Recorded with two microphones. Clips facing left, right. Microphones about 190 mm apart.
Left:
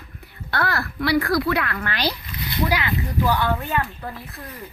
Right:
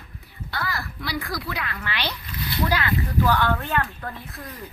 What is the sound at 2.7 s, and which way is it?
A woman's voice, 10° left (ahead or behind).